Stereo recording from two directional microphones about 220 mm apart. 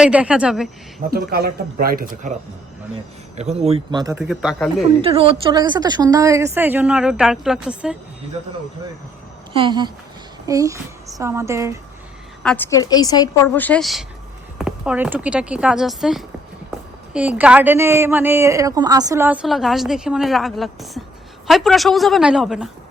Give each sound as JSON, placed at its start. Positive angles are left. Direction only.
{"t": 0.0, "sound": "speech", "side_deg": -5}
{"t": 1.1, "sound": "a man's voice", "side_deg": -45}
{"t": 4.3, "sound": "speech", "side_deg": 0}
{"t": 5.0, "sound": "speech", "side_deg": -25}
{"t": 9.5, "sound": "a man's voice", "side_deg": -20}
{"t": 12.4, "sound": "a woman's voice", "side_deg": 5}